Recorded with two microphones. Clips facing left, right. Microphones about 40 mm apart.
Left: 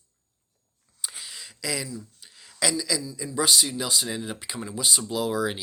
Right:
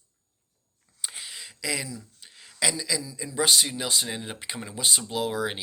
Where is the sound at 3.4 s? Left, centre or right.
Right.